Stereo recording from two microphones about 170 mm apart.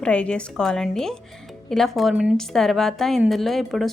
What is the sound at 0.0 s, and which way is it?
A woman's voice, 5° left (ahead or behind).